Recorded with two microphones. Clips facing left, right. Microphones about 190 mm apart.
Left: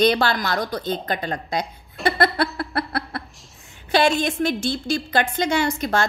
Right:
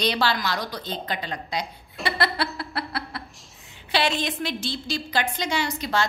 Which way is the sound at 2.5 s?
55° left (ahead or behind).